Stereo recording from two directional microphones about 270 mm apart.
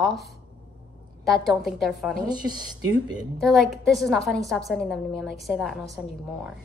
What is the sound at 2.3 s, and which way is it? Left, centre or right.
Speech, centre.